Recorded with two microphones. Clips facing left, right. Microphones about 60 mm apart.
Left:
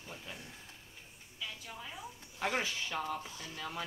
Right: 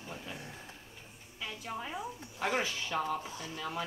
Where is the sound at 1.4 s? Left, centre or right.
Right.